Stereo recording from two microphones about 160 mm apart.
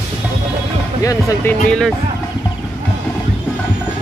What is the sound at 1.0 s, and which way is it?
Speech, 20° left (ahead or behind).